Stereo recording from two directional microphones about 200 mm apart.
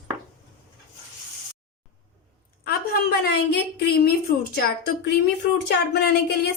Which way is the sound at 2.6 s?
55° left (ahead or behind).